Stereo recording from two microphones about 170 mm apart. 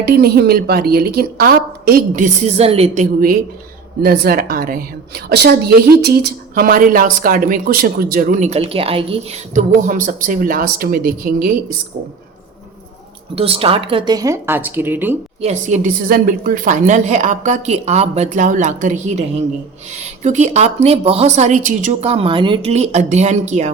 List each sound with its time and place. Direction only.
0.0 s a woman's voice: 70° right (ahead or behind)
2.2 s a woman's voice: 40° right (ahead or behind)
4.0 s a woman's voice: 70° right (ahead or behind)
13.3 s speech: 35° right (ahead or behind); by 15.1 s 10° right (ahead or behind)
15.4 s a woman's voice: 40° right (ahead or behind)
22.1 s a woman's voice: 30° right (ahead or behind)